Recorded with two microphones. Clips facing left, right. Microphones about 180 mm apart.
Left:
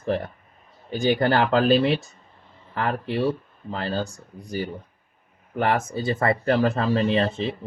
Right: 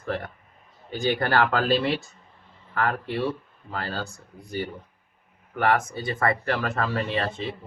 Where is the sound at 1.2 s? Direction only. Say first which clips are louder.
Left 3 dB; 25° left (ahead or behind).